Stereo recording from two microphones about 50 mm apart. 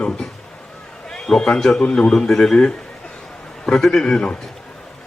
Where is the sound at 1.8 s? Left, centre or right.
Centre.